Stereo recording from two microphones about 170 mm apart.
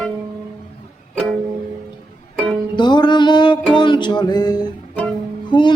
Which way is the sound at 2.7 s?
25° left (ahead or behind).